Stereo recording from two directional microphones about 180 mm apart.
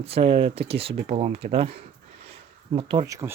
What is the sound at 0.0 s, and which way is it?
Speech, 30° right (ahead or behind).